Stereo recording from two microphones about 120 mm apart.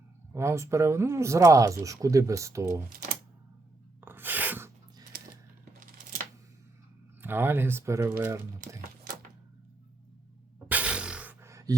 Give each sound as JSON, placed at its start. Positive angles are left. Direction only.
{"t": 0.3, "sound": "speech", "side_deg": -25}
{"t": 4.0, "sound": "writing", "side_deg": -15}
{"t": 7.2, "sound": "speech", "side_deg": -20}
{"t": 10.7, "sound": "a sound", "side_deg": -10}
{"t": 11.3, "sound": "beatboxing", "side_deg": -25}